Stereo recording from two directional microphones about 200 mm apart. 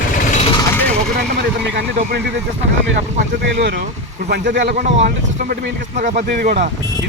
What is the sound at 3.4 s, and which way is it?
Speech, 60° right (ahead or behind).